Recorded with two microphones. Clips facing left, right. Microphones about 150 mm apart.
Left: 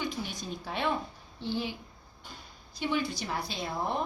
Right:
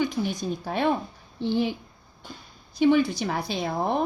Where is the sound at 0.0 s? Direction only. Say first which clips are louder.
Right 9 dB; 50° right (ahead or behind).